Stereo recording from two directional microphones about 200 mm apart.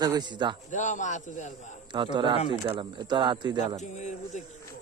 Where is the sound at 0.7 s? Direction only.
40° left (ahead or behind).